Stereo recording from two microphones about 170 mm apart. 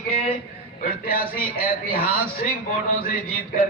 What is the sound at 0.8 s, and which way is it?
A man's voice, 60° left (ahead or behind).